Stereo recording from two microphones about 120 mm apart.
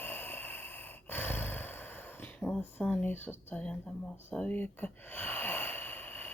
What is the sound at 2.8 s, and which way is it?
Speech, 5° left (ahead or behind).